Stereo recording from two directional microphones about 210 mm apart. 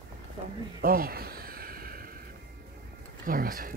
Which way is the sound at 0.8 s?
45° right (ahead or behind).